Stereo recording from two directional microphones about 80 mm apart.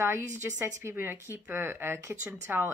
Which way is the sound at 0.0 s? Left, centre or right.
Right.